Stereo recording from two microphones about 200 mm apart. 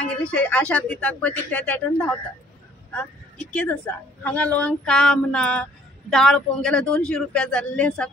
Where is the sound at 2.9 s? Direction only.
5° left (ahead or behind).